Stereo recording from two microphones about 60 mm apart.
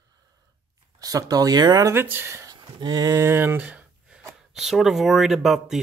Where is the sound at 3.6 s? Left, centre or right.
Right.